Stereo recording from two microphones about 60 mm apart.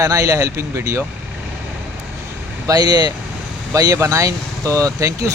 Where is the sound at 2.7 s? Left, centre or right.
Right.